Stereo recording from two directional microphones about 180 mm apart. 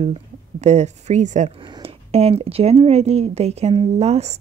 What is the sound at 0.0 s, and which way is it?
Speech, 40° right (ahead or behind).